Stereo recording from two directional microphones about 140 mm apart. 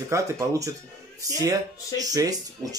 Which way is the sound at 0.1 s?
20° right (ahead or behind).